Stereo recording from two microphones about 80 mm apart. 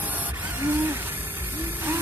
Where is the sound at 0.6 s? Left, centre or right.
Right.